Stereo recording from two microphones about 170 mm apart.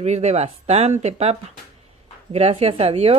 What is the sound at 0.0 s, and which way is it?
Speech, 40° right (ahead or behind).